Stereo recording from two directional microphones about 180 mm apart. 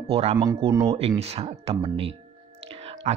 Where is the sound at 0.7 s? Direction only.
15° right (ahead or behind).